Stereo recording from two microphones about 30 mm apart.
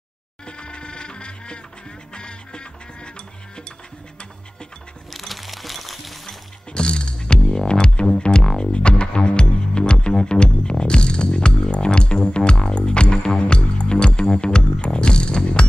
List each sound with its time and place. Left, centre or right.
0.5 s music: left
5.1 s music: centre
6.7 s music: left